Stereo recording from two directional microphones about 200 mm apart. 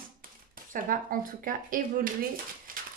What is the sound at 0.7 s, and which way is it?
Speech, 45° right (ahead or behind).